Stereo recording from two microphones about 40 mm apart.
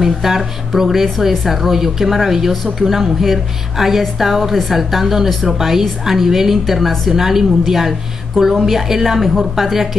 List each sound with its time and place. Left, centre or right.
0.0 s a woman's voice: centre